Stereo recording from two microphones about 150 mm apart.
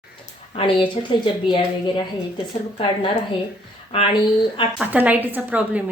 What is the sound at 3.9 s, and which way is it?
Speech, 35° left (ahead or behind).